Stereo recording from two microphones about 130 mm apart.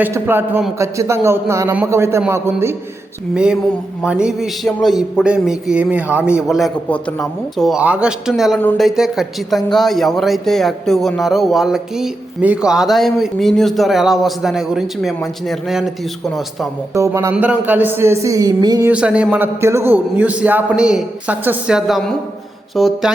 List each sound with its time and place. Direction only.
0.0 s a man's voice: 15° right (ahead or behind)
3.3 s a man's voice: 5° right (ahead or behind)
16.9 s a man's voice: 20° right (ahead or behind)
17.3 s a man's voice: 10° right (ahead or behind); by 18.9 s 30° right (ahead or behind)
18.9 s a man's voice: 10° right (ahead or behind)